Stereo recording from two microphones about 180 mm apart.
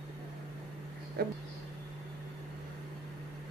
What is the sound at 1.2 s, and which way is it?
Speech, 60° right (ahead or behind).